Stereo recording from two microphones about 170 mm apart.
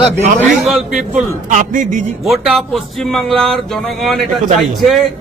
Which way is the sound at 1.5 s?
50° right (ahead or behind).